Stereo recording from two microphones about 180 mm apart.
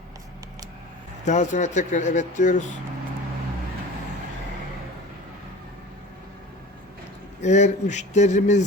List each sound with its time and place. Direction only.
1.2 s speech: 40° left (ahead or behind)
7.4 s a man's voice: 40° left (ahead or behind)